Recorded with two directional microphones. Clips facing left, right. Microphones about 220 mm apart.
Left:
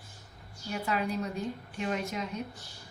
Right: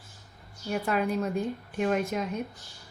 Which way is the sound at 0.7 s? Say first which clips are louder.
Right 4 dB; 50° right (ahead or behind).